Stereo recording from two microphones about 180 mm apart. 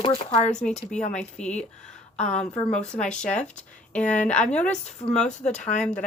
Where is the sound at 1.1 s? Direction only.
5° left (ahead or behind).